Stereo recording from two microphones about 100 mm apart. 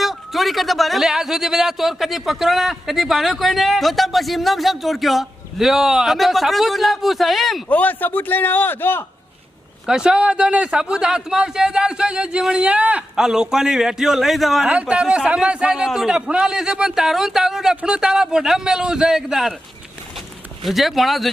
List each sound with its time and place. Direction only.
0.0 s speech: centre (ahead or behind)
7.7 s a man's voice: 15° left (ahead or behind)
9.8 s speech: 5° right (ahead or behind)
20.7 s speech: centre (ahead or behind)